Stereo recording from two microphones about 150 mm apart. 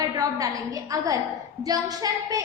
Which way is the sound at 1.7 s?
25° right (ahead or behind).